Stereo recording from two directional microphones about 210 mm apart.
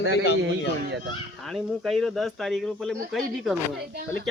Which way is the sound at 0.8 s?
55° right (ahead or behind).